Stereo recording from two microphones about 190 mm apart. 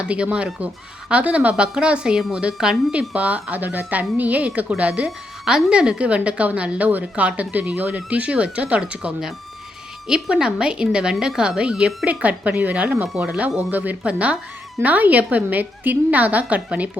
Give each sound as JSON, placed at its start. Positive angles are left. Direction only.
{"t": 0.0, "sound": "a woman's voice", "side_deg": -5}